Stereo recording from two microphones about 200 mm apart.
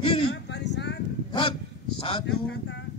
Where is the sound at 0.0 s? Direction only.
25° left (ahead or behind).